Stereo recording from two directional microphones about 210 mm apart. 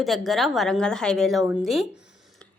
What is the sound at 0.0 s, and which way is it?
A woman's voice, centre (ahead or behind).